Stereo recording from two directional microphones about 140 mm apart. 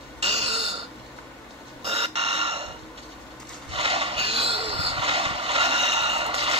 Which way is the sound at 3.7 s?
45° right (ahead or behind).